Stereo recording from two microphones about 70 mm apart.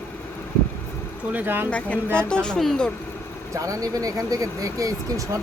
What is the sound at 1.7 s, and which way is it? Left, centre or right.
Speech, centre.